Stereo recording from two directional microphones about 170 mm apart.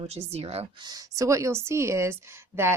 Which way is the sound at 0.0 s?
35° right (ahead or behind).